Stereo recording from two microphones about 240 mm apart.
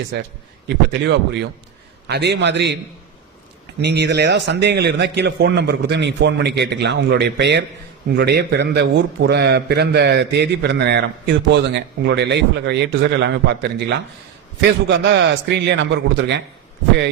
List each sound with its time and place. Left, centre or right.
1.0 s a man's voice: right
3.8 s a man's voice: right